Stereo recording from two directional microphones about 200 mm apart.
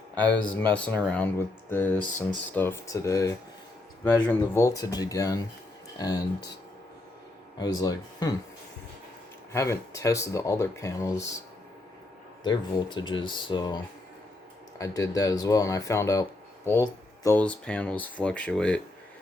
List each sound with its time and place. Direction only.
0.5 s speech: 5° left (ahead or behind)
7.6 s speech: 20° left (ahead or behind)
9.5 s speech: 15° left (ahead or behind)
12.4 s speech: 20° left (ahead or behind); by 18.8 s 5° left (ahead or behind)